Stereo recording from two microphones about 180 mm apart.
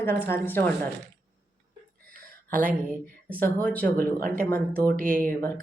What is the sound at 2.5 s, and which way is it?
Speech, 50° right (ahead or behind).